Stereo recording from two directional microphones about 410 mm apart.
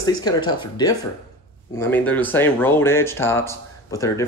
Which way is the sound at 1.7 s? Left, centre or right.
Centre.